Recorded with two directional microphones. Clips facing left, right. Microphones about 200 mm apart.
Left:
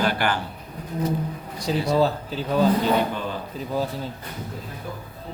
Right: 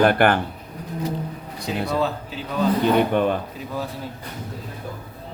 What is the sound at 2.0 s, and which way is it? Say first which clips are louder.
Speech: left 3 dB; 35° left (ahead or behind).